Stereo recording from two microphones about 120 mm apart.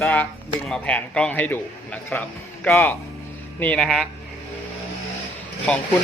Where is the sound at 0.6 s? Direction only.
5° left (ahead or behind); by 3.0 s 25° left (ahead or behind).